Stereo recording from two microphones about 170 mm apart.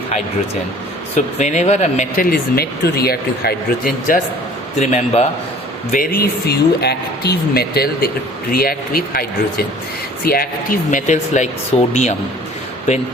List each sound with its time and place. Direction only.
1.1 s speech: 45° left (ahead or behind)
4.8 s a man's voice: 40° left (ahead or behind)
5.9 s speech: 55° left (ahead or behind)
10.2 s speech: 60° left (ahead or behind); by 12.1 s 40° left (ahead or behind)